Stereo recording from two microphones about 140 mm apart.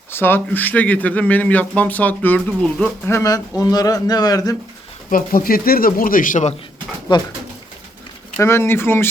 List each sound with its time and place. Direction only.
0.1 s speech: 15° left (ahead or behind)
3.1 s a man's voice: 20° left (ahead or behind)
5.1 s speech: 90° left; by 6.5 s 70° left (ahead or behind)
8.4 s speech: 20° left (ahead or behind)